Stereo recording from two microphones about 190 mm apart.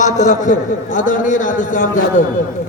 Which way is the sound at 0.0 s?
40° left (ahead or behind).